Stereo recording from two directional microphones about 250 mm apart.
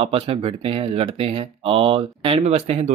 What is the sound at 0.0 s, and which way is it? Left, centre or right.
Speech, right.